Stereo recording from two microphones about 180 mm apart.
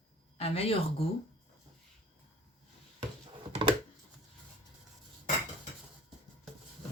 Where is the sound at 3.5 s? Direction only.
30° right (ahead or behind).